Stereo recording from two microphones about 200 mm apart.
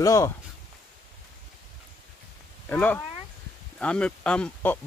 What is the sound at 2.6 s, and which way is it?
Speech, 10° left (ahead or behind).